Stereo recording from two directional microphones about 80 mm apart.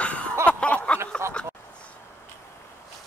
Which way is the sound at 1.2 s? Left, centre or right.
Right.